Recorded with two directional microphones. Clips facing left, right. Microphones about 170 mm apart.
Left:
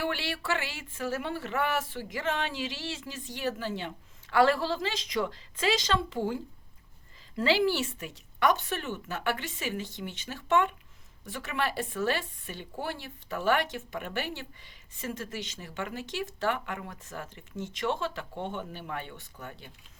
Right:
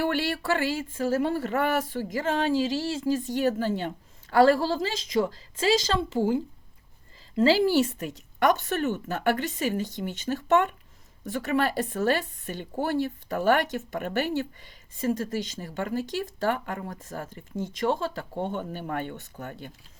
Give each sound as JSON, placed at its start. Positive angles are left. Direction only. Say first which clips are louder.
{"t": 0.0, "sound": "a woman's voice", "louder": "right 6 dB", "side_deg": -45}
{"t": 7.4, "sound": "speech", "louder": "right 5 dB", "side_deg": -40}